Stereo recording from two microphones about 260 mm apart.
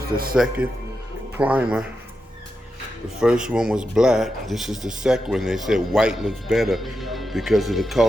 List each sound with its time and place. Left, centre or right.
0.1 s speech: right
1.4 s speech: centre
3.2 s speech: centre